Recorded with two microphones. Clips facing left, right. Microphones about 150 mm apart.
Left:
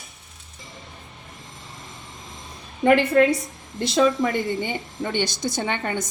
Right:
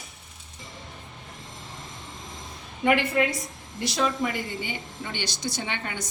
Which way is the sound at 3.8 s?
50° left (ahead or behind).